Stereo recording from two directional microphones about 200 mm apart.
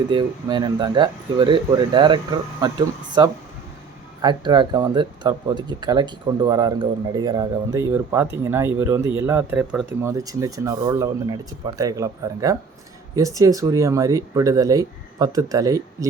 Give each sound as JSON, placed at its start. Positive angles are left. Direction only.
{"t": 0.1, "sound": "speech", "side_deg": -20}